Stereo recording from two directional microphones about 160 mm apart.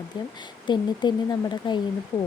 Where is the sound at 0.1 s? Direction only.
30° left (ahead or behind).